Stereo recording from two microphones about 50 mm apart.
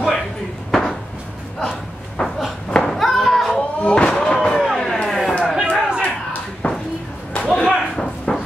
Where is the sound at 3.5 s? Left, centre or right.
Centre.